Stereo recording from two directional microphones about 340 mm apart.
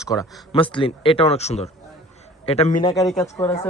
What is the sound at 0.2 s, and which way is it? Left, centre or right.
Speech, centre.